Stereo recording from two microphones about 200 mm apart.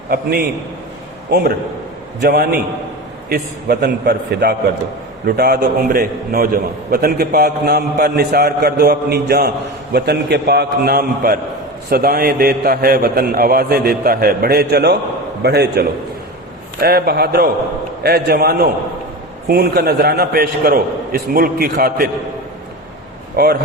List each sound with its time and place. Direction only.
0.1 s a man's voice: 50° right (ahead or behind)
2.2 s a man's voice: 50° right (ahead or behind)
23.4 s a man's voice: 50° right (ahead or behind)